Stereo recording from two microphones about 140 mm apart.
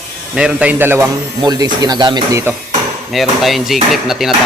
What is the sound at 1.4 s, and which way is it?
Speech, 25° right (ahead or behind).